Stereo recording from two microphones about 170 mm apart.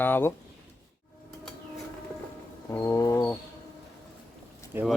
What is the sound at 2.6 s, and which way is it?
Speech, 15° left (ahead or behind).